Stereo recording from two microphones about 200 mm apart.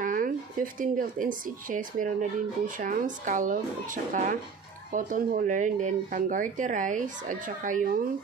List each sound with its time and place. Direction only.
0.0 s speech: 45° right (ahead or behind)